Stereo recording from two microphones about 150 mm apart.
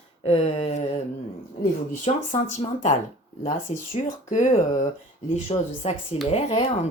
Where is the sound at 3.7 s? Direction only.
45° left (ahead or behind).